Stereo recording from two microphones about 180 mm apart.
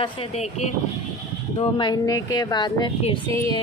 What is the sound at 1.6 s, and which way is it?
Speech, 25° left (ahead or behind).